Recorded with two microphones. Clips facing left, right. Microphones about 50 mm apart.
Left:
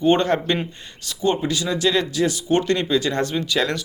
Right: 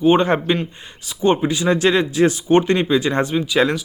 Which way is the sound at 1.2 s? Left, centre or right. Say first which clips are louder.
Right 4 dB; right.